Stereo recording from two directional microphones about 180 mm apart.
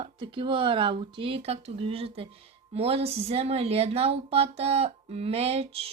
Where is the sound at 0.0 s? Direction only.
30° right (ahead or behind).